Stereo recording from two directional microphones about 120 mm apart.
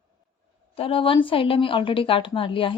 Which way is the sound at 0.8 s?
50° left (ahead or behind).